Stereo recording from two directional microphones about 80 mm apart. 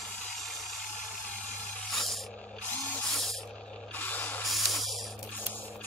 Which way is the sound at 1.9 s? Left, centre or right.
Centre.